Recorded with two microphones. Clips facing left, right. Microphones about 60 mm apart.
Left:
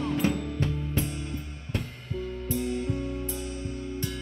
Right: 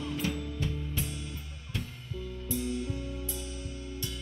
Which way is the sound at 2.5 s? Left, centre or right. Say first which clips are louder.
Left 3 dB; left.